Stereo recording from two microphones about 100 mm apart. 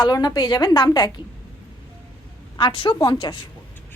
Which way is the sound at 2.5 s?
60° left (ahead or behind).